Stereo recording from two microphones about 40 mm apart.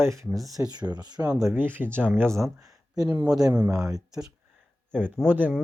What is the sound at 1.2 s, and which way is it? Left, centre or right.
Speech, right.